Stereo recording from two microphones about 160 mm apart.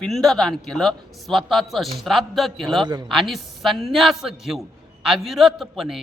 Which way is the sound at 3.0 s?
Centre (ahead or behind).